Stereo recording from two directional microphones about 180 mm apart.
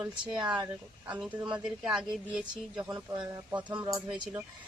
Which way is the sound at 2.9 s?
15° right (ahead or behind).